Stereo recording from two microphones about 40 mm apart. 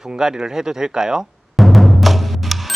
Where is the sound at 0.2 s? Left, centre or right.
Centre.